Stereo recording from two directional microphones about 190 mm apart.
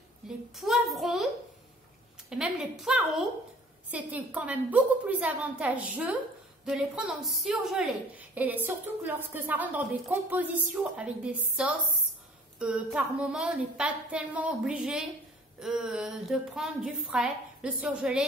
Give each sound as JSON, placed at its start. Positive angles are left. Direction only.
{"t": 0.2, "sound": "a sound", "side_deg": -5}
{"t": 0.6, "sound": "a woman's voice", "side_deg": 0}
{"t": 2.2, "sound": "a woman's voice", "side_deg": -5}